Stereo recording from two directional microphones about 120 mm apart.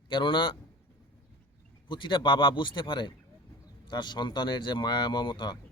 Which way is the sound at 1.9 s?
40° left (ahead or behind).